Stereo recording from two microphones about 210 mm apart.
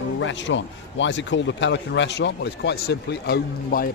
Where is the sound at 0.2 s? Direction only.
60° left (ahead or behind).